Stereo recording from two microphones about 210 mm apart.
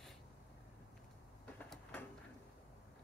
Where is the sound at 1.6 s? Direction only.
5° left (ahead or behind).